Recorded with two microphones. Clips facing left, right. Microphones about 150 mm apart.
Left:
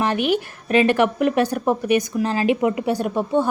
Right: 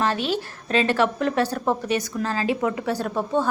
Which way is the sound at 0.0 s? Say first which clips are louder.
Left 4 dB; 15° left (ahead or behind).